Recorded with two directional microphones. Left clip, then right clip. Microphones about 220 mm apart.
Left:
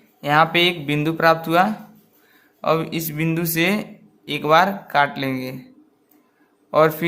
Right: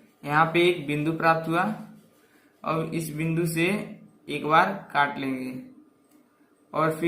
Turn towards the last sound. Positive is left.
turn(degrees=45)  # may be behind; listen again after turning